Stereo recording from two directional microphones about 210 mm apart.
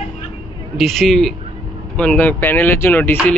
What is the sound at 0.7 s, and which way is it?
Speech, centre (ahead or behind).